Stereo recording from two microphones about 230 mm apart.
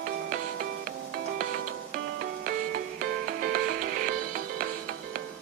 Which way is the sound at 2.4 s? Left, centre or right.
Right.